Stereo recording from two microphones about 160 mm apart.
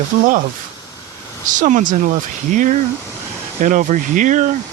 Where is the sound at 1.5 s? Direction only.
50° right (ahead or behind).